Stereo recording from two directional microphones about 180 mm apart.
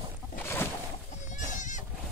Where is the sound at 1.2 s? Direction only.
45° left (ahead or behind).